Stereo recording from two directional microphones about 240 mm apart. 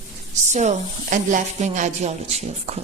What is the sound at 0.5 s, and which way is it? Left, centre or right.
A man's voice, right.